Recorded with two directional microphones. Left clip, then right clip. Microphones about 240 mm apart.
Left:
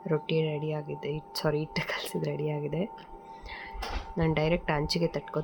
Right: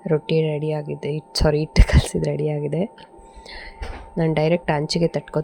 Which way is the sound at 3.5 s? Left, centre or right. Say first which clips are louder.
Right 4 dB; right.